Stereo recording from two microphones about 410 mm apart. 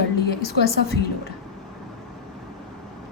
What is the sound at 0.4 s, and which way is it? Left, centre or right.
Speech, left.